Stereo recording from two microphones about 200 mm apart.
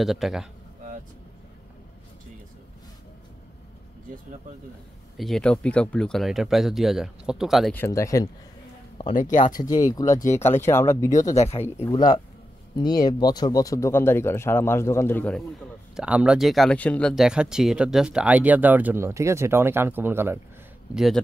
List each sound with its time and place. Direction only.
0.0 s speech: centre (ahead or behind)
5.1 s speech: centre (ahead or behind)
7.7 s speech: 15° left (ahead or behind)
9.1 s speech: 40° left (ahead or behind)
9.6 s speech: 20° left (ahead or behind)
11.3 s speech: 30° left (ahead or behind)
11.6 s speech: 10° left (ahead or behind)
16.0 s speech: 5° right (ahead or behind)